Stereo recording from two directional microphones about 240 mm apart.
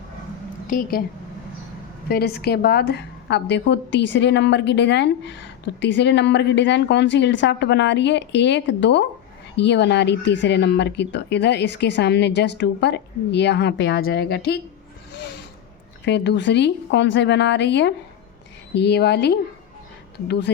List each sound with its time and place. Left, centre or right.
0.7 s a woman's voice: left
2.0 s a woman's voice: left
16.0 s a woman's voice: left